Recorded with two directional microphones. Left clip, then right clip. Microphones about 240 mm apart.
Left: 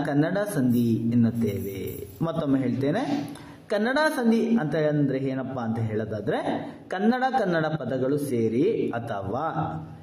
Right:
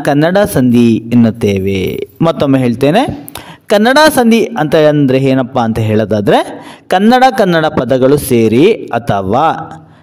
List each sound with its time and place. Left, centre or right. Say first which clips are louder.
0.0 s speech: right 16 dB; right